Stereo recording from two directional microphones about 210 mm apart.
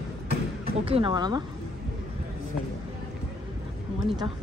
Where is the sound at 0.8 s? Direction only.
25° right (ahead or behind).